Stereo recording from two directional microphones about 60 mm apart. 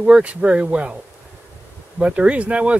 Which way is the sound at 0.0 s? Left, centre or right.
Centre.